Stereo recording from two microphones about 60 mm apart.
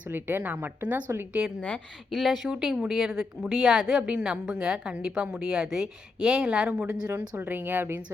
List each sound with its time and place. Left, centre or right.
0.1 s a woman's voice: right
2.1 s speech: centre
2.5 s a woman's voice: centre
3.9 s a woman's voice: right
6.7 s a woman's voice: right